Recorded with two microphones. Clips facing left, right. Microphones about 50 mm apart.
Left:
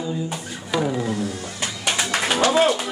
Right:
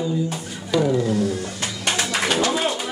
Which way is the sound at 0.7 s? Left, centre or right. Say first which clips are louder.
Right 3 dB; centre.